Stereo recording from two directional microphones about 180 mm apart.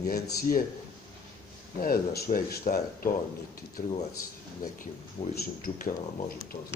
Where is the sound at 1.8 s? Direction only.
55° left (ahead or behind).